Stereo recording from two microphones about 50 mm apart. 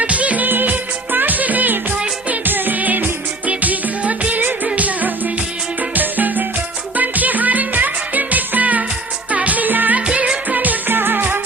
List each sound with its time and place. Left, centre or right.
0.0 s music of bollywood: right
2.3 s music: right
10.1 s music: right